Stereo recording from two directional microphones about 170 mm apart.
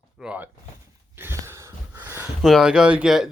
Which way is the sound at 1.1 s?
15° right (ahead or behind).